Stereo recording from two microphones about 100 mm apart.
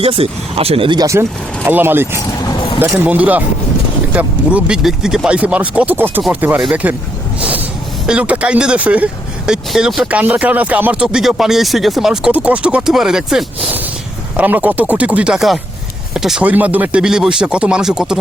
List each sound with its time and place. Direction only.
0.0 s speech: 75° right (ahead or behind)
1.0 s speech: 30° right (ahead or behind); by 6.9 s 10° right (ahead or behind)
7.3 s a sound: 10° right (ahead or behind)
8.0 s speech: 10° right (ahead or behind)
14.3 s speech: 15° right (ahead or behind)
16.4 s speech: 15° right (ahead or behind)